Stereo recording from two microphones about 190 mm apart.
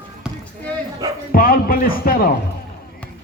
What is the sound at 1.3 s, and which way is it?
A man's voice, 50° left (ahead or behind).